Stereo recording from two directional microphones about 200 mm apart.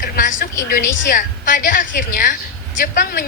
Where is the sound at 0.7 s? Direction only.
40° left (ahead or behind).